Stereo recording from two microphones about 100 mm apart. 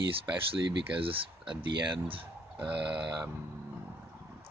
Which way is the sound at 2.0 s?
65° right (ahead or behind).